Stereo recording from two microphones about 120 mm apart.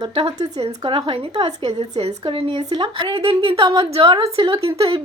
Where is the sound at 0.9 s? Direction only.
40° right (ahead or behind).